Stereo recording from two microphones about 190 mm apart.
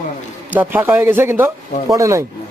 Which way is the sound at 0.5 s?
10° right (ahead or behind).